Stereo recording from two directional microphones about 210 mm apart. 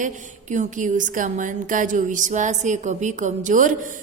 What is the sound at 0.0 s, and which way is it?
Speech, 35° right (ahead or behind).